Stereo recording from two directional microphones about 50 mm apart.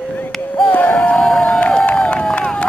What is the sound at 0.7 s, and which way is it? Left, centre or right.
Music, left.